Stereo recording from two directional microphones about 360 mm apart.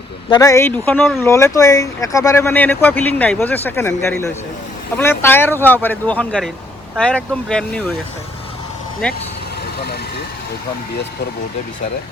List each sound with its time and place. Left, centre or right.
0.3 s speech: centre
9.7 s speech: left